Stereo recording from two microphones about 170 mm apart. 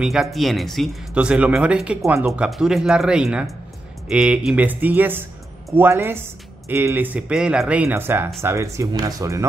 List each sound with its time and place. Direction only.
0.0 s speech: centre (ahead or behind); by 9.5 s 20° right (ahead or behind)